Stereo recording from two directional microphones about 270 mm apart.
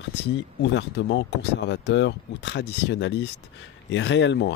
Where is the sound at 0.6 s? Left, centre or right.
Left.